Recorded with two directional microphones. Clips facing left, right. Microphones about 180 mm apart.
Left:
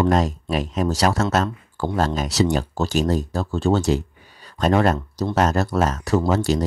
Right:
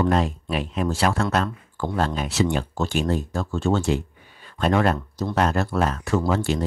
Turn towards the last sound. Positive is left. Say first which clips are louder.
# left 3 dB
turn(degrees=40)  # may be behind; listen again after turning